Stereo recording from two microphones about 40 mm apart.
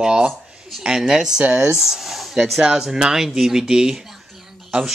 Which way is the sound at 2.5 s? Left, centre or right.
Centre.